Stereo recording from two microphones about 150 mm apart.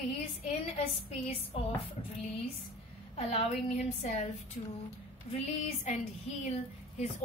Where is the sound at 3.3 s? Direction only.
45° left (ahead or behind).